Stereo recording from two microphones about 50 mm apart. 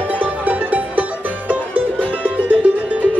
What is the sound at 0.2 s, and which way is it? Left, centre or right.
Music, right.